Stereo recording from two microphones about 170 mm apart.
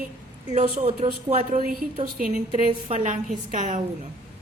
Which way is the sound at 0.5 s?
40° right (ahead or behind).